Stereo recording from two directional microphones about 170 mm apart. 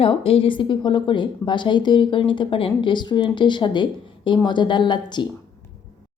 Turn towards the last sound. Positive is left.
turn(degrees=25)  # may be behind; listen again after turning